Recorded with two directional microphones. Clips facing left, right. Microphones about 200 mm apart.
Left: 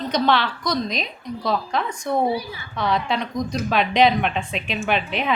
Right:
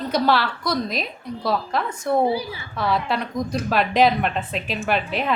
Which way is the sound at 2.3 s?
30° right (ahead or behind).